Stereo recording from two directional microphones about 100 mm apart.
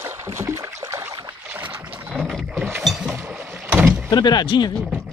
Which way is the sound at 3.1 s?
15° right (ahead or behind).